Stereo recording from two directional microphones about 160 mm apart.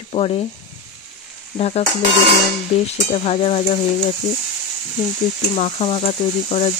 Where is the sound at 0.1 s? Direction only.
40° left (ahead or behind).